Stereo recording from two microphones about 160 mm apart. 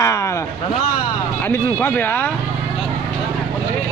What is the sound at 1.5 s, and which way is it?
Speech, 10° left (ahead or behind).